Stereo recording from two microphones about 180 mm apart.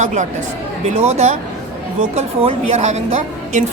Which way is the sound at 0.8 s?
40° right (ahead or behind).